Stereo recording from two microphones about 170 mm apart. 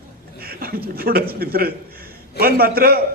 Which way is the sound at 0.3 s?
60° right (ahead or behind).